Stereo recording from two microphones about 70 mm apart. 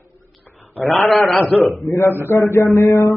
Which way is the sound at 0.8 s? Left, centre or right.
Centre.